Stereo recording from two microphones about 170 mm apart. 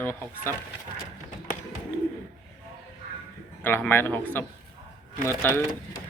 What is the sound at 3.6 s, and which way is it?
Speech, 10° left (ahead or behind).